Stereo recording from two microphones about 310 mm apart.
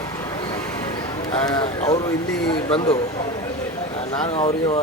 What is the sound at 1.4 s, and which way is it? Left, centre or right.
Speech, centre.